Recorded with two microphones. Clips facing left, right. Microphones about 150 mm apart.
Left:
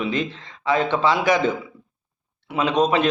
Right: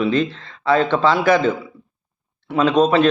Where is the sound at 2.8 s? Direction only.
15° left (ahead or behind).